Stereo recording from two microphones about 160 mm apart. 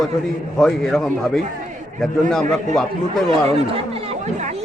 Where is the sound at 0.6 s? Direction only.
5° left (ahead or behind).